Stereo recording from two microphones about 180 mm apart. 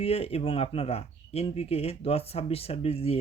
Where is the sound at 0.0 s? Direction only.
35° left (ahead or behind).